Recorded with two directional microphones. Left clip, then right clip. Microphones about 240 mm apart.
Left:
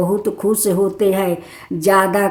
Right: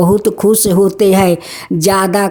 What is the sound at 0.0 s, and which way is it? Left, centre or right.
A woman's voice, right.